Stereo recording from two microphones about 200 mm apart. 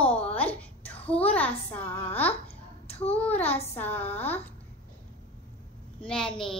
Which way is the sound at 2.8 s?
30° left (ahead or behind).